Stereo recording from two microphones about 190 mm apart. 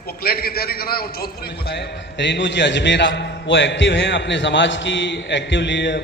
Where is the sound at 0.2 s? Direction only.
55° left (ahead or behind).